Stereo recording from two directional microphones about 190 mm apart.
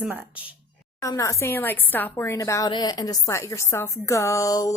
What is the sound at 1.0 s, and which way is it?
A woman's voice, 15° left (ahead or behind).